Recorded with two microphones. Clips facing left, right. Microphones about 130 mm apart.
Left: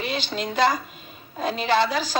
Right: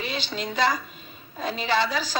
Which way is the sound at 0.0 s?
55° left (ahead or behind).